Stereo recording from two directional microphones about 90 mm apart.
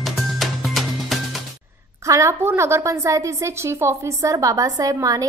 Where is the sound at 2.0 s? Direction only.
35° right (ahead or behind).